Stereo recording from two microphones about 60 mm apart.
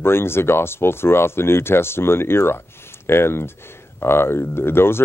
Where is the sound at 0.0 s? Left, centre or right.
Left.